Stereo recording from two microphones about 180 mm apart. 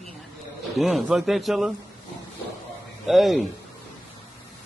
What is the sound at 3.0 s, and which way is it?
Speech, centre (ahead or behind).